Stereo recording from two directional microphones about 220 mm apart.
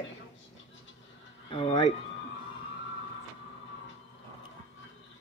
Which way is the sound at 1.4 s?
20° left (ahead or behind).